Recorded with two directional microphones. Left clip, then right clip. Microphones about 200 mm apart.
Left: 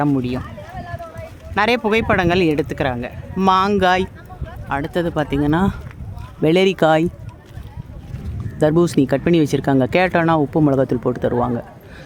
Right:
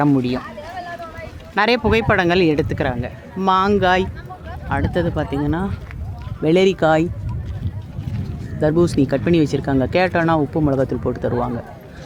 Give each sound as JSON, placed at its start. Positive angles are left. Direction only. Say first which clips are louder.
{"t": 0.0, "sound": "speech", "louder": "right 2 dB", "side_deg": 10}
{"t": 0.7, "sound": "a sound", "louder": "right 3 dB", "side_deg": -50}
{"t": 1.5, "sound": "speech", "louder": "even", "side_deg": 20}
{"t": 8.6, "sound": "speech", "louder": "left 1 dB", "side_deg": 25}